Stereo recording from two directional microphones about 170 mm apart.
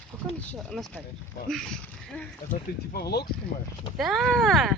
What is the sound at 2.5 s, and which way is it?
Speech, 65° left (ahead or behind).